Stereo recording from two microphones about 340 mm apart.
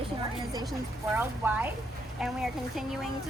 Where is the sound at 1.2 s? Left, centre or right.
Centre.